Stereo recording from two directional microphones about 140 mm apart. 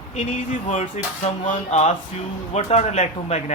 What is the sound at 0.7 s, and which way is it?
Speech, 55° left (ahead or behind).